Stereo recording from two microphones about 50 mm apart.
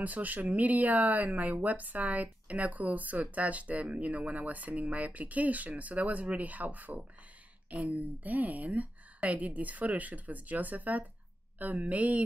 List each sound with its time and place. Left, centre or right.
0.0 s speech: right